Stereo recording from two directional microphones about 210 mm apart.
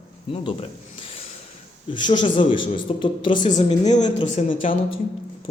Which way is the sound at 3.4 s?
35° left (ahead or behind).